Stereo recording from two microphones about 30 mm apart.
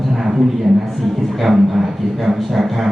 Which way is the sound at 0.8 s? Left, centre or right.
Centre.